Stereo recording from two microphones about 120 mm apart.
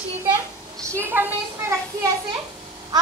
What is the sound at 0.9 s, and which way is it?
Speech, 20° right (ahead or behind).